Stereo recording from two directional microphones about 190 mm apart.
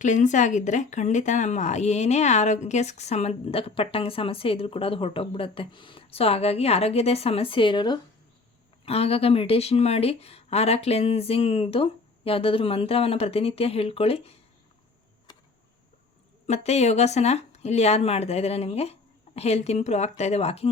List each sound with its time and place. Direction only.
0.0 s a woman's voice: 40° left (ahead or behind)
16.5 s a woman's voice: 35° left (ahead or behind)